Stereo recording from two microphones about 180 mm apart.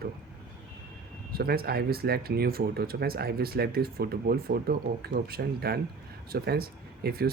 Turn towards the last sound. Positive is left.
turn(degrees=-60)  # may be behind; listen again after turning